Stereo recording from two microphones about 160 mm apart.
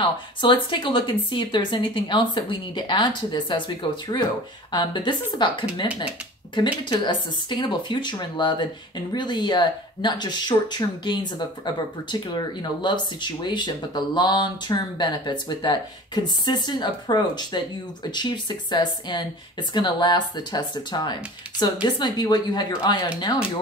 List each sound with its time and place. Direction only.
0.0 s speech: 30° left (ahead or behind)